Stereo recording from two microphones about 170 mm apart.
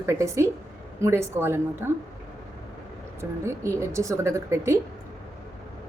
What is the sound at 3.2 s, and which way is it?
A woman's voice, 15° right (ahead or behind).